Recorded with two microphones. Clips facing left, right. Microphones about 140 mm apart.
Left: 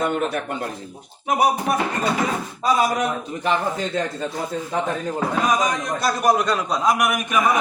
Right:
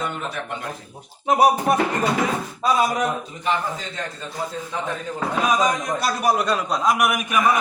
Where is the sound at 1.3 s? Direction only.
30° right (ahead or behind).